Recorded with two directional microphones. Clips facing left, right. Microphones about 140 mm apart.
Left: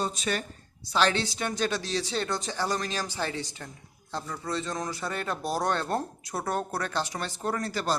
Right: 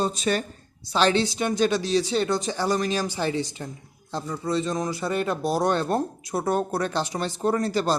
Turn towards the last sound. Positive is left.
turn(degrees=-25)  # may be behind; listen again after turning